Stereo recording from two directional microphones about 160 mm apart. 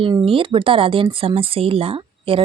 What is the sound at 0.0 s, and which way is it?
A woman's voice, 35° right (ahead or behind).